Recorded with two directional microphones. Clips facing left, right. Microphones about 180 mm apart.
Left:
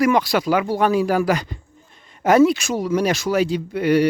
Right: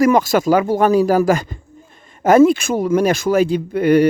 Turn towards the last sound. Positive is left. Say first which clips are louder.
# right 4 dB
turn(degrees=-50)  # may be behind; listen again after turning